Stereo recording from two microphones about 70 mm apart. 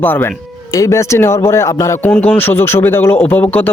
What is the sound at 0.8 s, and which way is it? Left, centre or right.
A man's voice, left.